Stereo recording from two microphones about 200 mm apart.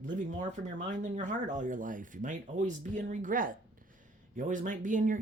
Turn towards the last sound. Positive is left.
turn(degrees=-40)  # may be behind; listen again after turning